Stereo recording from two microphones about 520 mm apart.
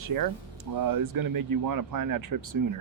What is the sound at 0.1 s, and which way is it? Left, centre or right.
Speech, right.